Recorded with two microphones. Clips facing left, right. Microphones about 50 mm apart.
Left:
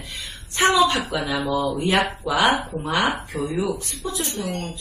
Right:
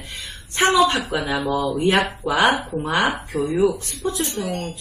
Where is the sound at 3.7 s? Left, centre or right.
Right.